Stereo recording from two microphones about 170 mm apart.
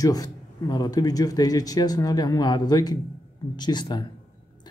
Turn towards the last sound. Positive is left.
turn(degrees=25)  # may be behind; listen again after turning